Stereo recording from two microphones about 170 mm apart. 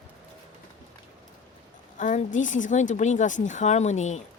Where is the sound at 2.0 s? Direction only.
45° left (ahead or behind).